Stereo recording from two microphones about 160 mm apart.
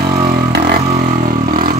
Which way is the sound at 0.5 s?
75° right (ahead or behind).